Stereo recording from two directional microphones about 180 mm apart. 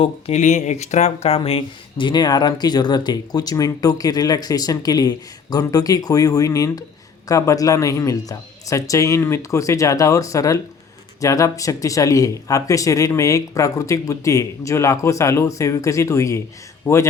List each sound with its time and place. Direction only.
0.0 s speech: 40° left (ahead or behind); by 17.1 s 15° left (ahead or behind)